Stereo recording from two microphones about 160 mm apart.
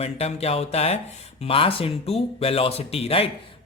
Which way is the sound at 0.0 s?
40° left (ahead or behind).